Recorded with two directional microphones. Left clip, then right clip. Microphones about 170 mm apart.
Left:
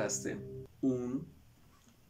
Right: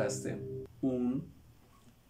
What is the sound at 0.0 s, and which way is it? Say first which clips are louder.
Speech: right 2 dB; centre (ahead or behind).